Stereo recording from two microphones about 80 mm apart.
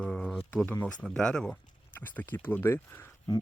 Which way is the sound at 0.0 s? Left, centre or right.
Centre.